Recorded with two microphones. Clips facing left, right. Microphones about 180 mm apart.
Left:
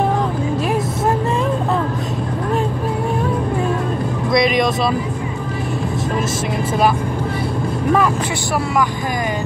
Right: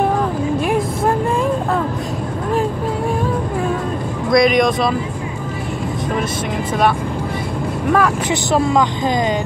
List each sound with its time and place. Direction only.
4.3 s vehicle: centre (ahead or behind)